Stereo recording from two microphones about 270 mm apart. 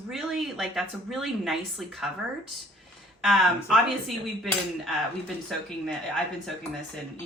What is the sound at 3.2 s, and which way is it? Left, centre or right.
Speech, centre.